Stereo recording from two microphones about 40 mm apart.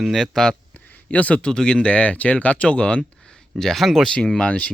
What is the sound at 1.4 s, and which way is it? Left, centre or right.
Speech, centre.